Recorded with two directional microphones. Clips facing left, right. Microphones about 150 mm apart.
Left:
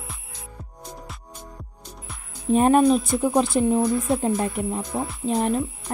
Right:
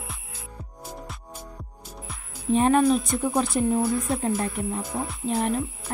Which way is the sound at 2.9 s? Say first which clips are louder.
Left 3 dB; centre (ahead or behind).